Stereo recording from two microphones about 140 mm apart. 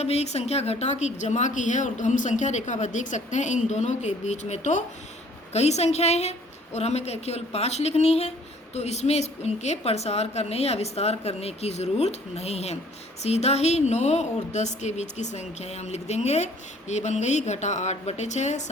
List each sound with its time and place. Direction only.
0.0 s a woman's voice: 50° left (ahead or behind)